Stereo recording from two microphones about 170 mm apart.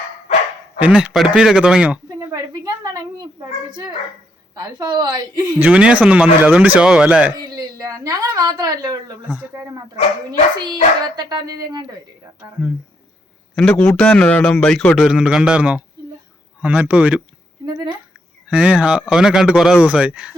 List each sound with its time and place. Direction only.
0.8 s a man's voice: 5° right (ahead or behind)
2.0 s a sound: 20° right (ahead or behind)
3.7 s speech: 25° right (ahead or behind)
5.5 s speech: 10° right (ahead or behind)
7.3 s a woman's voice: 20° right (ahead or behind)
9.2 s speech: 5° right (ahead or behind)
10.6 s speech: 25° right (ahead or behind)
13.6 s a man's voice: 5° left (ahead or behind)
17.7 s speech: 30° right (ahead or behind)
18.4 s speech: 5° right (ahead or behind)